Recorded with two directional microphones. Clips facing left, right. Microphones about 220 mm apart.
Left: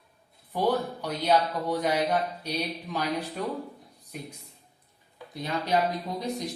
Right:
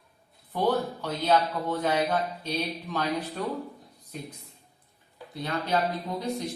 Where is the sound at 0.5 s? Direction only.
10° left (ahead or behind).